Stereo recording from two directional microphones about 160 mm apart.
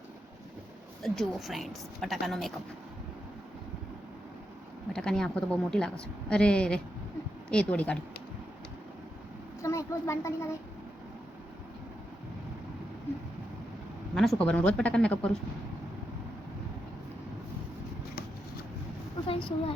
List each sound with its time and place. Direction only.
1.0 s a woman's voice: centre (ahead or behind)
4.9 s a woman's voice: 5° left (ahead or behind)
9.6 s speech: 20° left (ahead or behind)
14.2 s a woman's voice: 5° left (ahead or behind)
19.3 s a woman's voice: 35° left (ahead or behind)